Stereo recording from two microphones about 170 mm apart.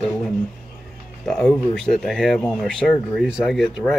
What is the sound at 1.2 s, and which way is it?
Speech, 5° left (ahead or behind).